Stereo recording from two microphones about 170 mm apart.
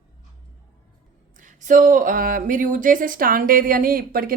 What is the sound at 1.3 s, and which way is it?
Speech, 50° right (ahead or behind).